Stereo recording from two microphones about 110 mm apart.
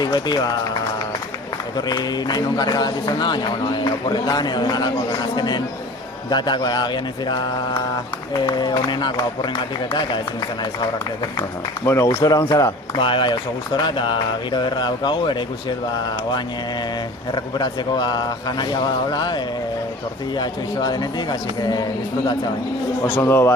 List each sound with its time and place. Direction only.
0.0 s a man's voice: 40° left (ahead or behind)
1.7 s a man's voice: 40° left (ahead or behind)
11.9 s a man's voice: 30° left (ahead or behind)
13.0 s speech: 50° left (ahead or behind)
17.3 s a man's voice: 40° left (ahead or behind)
23.0 s a man's voice: 20° left (ahead or behind)